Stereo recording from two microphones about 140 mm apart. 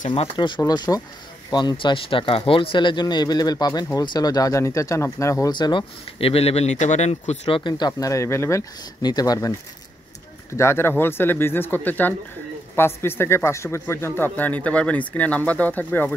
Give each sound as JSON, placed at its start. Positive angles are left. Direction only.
{"t": 0.1, "sound": "speech", "side_deg": 35}
{"t": 0.6, "sound": "speech", "side_deg": 25}
{"t": 5.5, "sound": "speech", "side_deg": 35}
{"t": 10.5, "sound": "a man's voice", "side_deg": 20}